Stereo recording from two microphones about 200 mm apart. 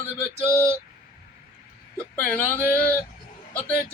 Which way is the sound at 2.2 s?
5° left (ahead or behind).